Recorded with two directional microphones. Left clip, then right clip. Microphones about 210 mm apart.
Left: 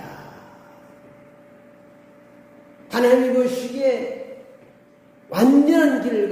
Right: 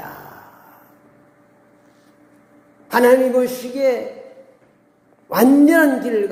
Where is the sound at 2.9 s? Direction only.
40° right (ahead or behind).